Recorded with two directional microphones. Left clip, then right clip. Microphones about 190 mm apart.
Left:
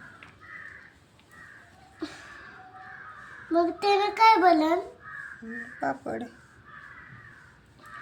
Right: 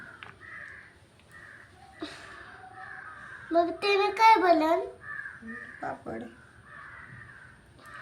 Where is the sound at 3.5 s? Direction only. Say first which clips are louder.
Left 1 dB; 10° left (ahead or behind).